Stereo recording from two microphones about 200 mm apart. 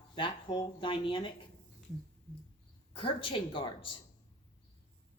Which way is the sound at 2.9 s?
25° left (ahead or behind).